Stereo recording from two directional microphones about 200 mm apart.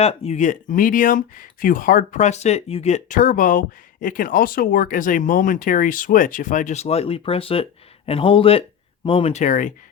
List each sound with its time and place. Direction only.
0.0 s speech: 30° left (ahead or behind)